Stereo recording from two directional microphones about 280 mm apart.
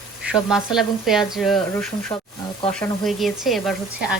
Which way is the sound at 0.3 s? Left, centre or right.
Centre.